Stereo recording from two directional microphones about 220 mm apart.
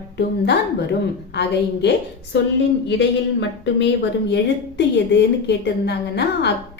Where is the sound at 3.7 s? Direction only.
50° left (ahead or behind).